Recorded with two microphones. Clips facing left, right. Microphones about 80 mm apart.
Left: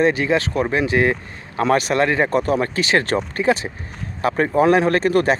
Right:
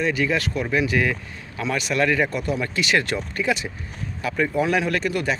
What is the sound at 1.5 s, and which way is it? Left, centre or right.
Speech, left.